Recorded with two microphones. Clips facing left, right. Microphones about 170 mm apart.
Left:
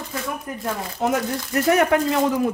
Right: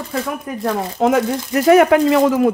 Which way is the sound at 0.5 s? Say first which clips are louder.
Right 7 dB; 90° right.